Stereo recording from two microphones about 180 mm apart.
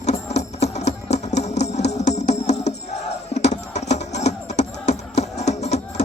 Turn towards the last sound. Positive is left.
turn(degrees=40)  # may be behind; listen again after turning